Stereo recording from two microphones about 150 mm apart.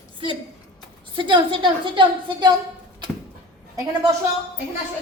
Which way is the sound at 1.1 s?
30° right (ahead or behind).